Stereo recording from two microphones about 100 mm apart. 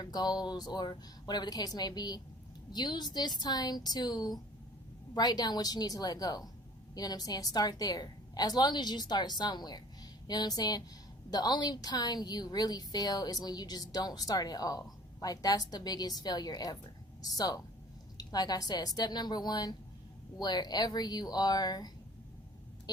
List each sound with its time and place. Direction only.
0.0 s a woman's voice: 40° left (ahead or behind)